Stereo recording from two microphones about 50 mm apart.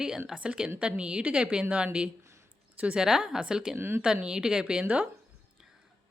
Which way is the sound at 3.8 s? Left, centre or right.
Right.